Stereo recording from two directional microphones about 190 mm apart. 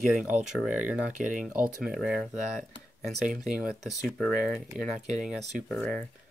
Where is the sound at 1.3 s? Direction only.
45° right (ahead or behind).